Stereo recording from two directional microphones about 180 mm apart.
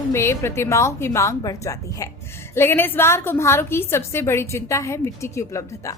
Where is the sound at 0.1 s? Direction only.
15° left (ahead or behind).